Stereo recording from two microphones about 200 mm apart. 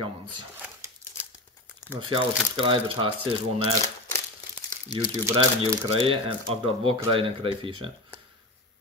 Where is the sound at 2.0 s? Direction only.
25° right (ahead or behind).